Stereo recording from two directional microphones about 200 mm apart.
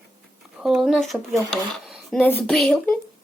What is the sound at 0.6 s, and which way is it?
Speech, centre (ahead or behind).